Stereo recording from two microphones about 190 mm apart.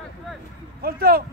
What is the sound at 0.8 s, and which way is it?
Speech, 55° right (ahead or behind).